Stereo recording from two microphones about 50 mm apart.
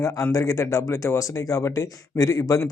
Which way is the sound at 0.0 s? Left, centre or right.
Left.